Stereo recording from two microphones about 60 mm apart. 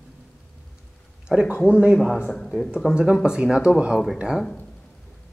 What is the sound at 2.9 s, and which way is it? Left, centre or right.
Speech, centre.